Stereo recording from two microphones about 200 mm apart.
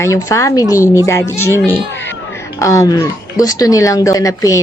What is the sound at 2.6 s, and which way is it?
Speech, 15° left (ahead or behind).